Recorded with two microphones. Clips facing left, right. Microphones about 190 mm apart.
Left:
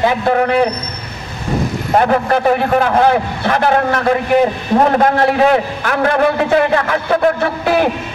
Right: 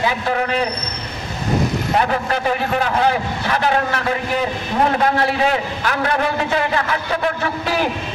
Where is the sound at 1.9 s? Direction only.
50° left (ahead or behind).